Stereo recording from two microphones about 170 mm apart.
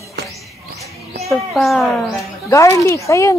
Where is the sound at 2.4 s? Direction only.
20° left (ahead or behind).